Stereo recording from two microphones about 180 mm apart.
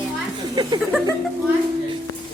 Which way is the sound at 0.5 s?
25° right (ahead or behind).